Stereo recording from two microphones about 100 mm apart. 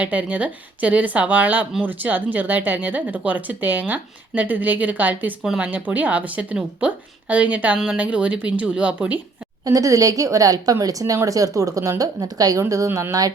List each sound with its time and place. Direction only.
0.0 s speech: 15° right (ahead or behind)
9.6 s speech: 35° right (ahead or behind)